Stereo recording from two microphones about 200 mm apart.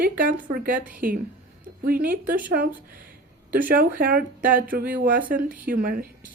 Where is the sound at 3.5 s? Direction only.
45° right (ahead or behind).